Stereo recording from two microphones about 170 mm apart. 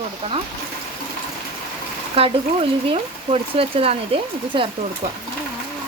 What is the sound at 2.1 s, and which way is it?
Speech, 35° right (ahead or behind).